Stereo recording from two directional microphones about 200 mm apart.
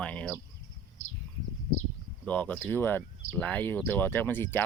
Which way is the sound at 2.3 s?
10° left (ahead or behind).